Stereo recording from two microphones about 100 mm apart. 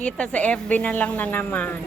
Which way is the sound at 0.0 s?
10° left (ahead or behind).